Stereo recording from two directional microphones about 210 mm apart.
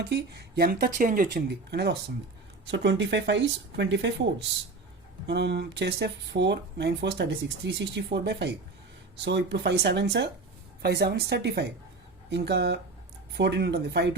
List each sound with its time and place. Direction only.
0.0 s speech: 50° right (ahead or behind)